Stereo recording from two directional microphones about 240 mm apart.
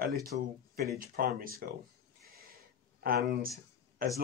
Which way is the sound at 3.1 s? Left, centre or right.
Right.